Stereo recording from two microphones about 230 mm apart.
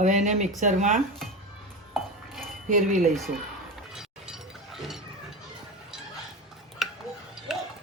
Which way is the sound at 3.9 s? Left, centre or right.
Centre.